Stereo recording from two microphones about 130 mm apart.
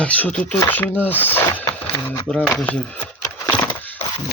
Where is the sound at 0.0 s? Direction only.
10° left (ahead or behind).